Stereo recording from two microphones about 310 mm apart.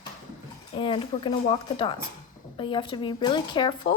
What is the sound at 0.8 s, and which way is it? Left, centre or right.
Speech, centre.